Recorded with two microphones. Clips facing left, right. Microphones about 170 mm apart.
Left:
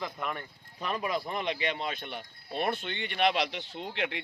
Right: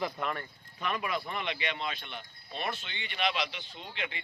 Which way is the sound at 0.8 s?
35° left (ahead or behind).